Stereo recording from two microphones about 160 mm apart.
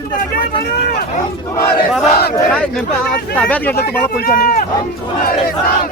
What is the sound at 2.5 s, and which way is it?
Speech, 5° left (ahead or behind).